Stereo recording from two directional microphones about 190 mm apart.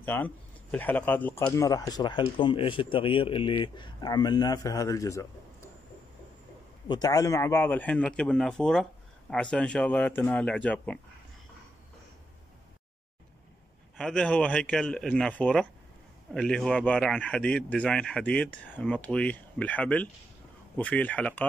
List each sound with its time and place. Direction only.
0.0 s speech: 10° left (ahead or behind)
6.9 s speech: 20° left (ahead or behind)
13.9 s speech: 5° left (ahead or behind)